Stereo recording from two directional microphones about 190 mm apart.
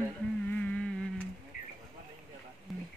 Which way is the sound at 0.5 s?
5° left (ahead or behind).